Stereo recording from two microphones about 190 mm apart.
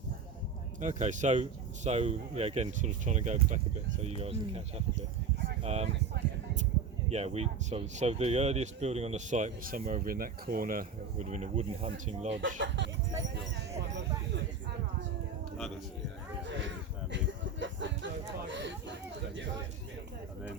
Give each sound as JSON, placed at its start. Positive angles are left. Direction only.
{"t": 0.8, "sound": "speech", "side_deg": -40}
{"t": 7.1, "sound": "speech", "side_deg": -35}
{"t": 12.5, "sound": "speech", "side_deg": -70}
{"t": 16.5, "sound": "a sound", "side_deg": -70}